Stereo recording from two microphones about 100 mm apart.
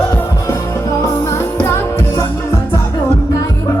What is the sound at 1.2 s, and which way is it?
Music, 30° left (ahead or behind).